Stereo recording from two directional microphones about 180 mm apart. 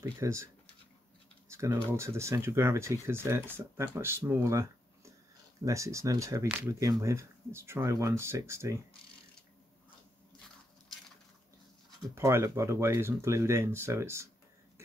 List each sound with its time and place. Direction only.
0.0 s speech: 15° right (ahead or behind)
2.0 s speech: 15° right (ahead or behind)
12.2 s speech: 15° right (ahead or behind)